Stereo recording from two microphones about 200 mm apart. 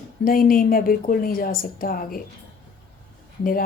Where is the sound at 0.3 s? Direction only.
45° left (ahead or behind).